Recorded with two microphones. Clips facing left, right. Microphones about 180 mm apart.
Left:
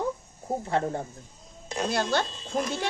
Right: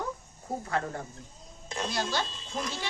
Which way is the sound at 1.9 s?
60° left (ahead or behind).